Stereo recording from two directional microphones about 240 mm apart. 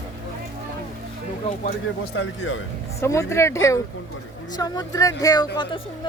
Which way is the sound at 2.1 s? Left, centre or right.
Left.